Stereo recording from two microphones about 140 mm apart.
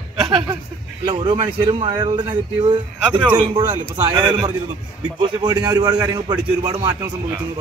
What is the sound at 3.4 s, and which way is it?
A man's voice, 30° right (ahead or behind).